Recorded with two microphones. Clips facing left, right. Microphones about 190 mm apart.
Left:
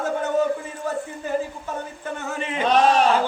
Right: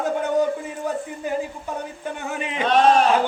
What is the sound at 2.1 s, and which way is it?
Speech, 15° right (ahead or behind).